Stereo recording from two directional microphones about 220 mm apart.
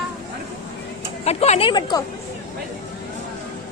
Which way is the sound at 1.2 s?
30° left (ahead or behind).